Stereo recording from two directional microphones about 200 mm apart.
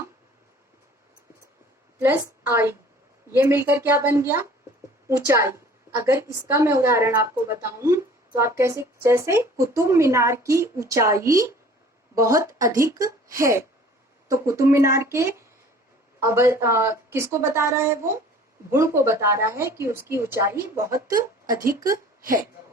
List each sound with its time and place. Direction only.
2.0 s a woman's voice: 10° right (ahead or behind)